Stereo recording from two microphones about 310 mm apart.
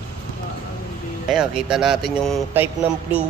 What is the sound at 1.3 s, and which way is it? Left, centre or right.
Speech, centre.